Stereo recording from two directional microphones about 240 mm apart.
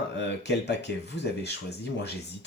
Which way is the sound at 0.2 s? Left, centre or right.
Left.